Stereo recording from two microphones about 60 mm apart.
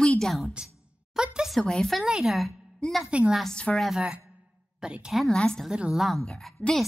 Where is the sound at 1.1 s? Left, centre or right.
Centre.